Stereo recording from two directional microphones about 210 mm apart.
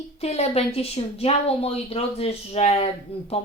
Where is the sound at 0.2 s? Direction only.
30° left (ahead or behind).